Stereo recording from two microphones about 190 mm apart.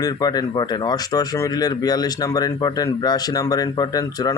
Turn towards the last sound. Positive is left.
turn(degrees=20)  # may be behind; listen again after turning